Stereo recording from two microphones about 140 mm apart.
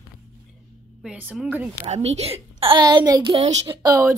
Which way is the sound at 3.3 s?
50° right (ahead or behind).